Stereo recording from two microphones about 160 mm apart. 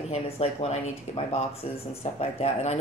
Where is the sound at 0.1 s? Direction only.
40° left (ahead or behind).